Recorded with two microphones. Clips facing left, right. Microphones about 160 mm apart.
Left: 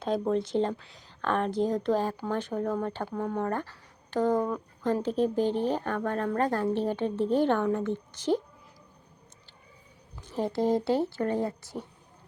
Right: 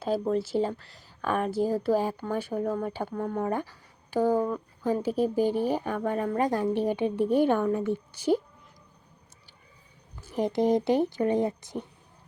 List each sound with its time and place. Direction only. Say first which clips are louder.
0.0 s speech: right 1 dB; 5° right (ahead or behind)
10.2 s speech: right 2 dB; 10° right (ahead or behind)